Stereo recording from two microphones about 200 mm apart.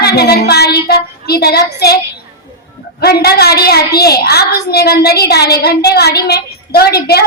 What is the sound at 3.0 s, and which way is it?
A woman's voice, 50° left (ahead or behind).